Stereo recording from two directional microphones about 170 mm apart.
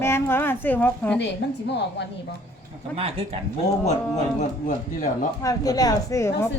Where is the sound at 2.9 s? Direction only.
35° right (ahead or behind).